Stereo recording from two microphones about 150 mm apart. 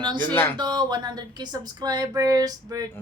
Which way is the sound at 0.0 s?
30° right (ahead or behind).